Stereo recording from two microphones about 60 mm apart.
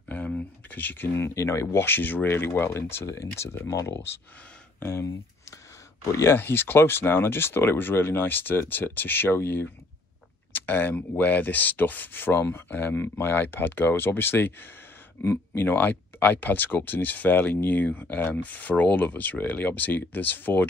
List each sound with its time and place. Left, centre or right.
0.7 s speech: left
1.1 s speech: left
3.1 s speech: left
4.7 s speech: left
6.3 s speech: left